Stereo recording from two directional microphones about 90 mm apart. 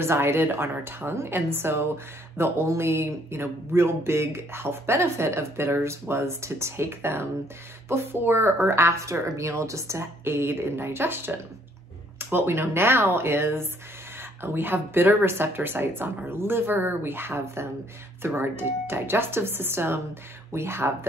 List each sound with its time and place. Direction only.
0.0 s speech: 25° right (ahead or behind)